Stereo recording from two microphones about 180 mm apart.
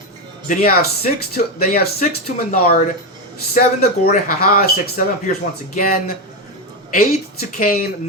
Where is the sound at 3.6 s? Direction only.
50° left (ahead or behind).